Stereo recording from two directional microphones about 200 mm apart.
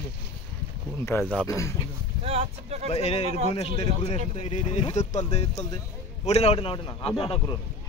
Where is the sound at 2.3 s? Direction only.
30° right (ahead or behind).